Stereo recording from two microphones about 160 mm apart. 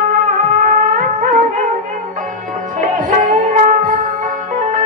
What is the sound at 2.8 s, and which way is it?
Music, 50° right (ahead or behind).